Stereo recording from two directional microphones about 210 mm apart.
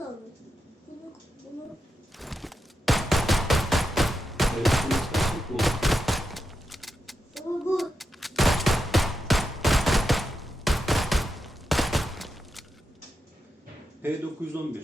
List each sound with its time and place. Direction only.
2.1 s fusillade: centre (ahead or behind)
14.0 s a sound: 10° right (ahead or behind)
14.4 s speech: 10° right (ahead or behind)